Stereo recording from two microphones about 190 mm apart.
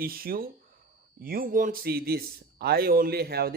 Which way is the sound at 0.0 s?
50° right (ahead or behind).